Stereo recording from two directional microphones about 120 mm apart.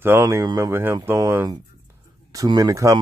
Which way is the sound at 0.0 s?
20° right (ahead or behind).